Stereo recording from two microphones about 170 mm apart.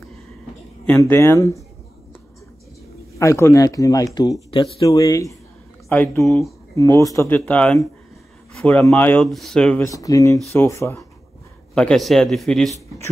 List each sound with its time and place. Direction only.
0.8 s speech: 10° left (ahead or behind)
3.2 s speech: 15° left (ahead or behind)
6.2 s speech: centre (ahead or behind)
6.7 s speech: 20° left (ahead or behind)
9.9 s speech: 20° left (ahead or behind)
11.7 s speech: 5° left (ahead or behind)